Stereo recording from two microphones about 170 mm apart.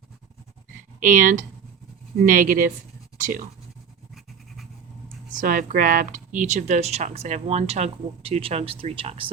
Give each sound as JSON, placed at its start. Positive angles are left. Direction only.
{"t": 0.9, "sound": "speech", "side_deg": -50}
{"t": 5.3, "sound": "speech", "side_deg": -55}